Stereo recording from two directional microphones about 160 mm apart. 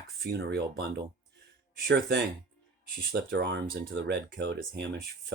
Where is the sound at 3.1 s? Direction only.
90° right.